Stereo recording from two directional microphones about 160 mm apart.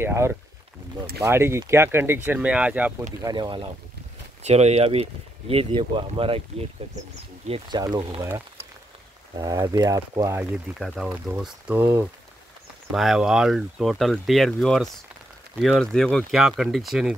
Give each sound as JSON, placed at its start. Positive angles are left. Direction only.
{"t": 0.0, "sound": "speech", "side_deg": -15}
{"t": 3.2, "sound": "speech", "side_deg": -25}
{"t": 4.4, "sound": "speech", "side_deg": -45}
{"t": 7.4, "sound": "speech", "side_deg": -35}
{"t": 9.4, "sound": "speech", "side_deg": -25}
{"t": 10.8, "sound": "speech", "side_deg": 0}
{"t": 12.9, "sound": "speech", "side_deg": 0}